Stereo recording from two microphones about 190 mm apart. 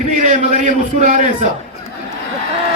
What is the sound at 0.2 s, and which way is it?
A man's voice, 40° right (ahead or behind).